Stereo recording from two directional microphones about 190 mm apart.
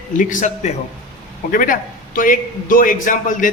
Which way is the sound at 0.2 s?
40° left (ahead or behind).